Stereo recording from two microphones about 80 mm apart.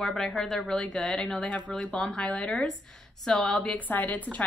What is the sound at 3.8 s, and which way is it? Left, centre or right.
Speech, left.